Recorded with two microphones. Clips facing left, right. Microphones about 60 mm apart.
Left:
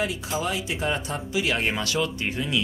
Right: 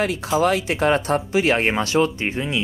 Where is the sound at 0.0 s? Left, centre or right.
Right.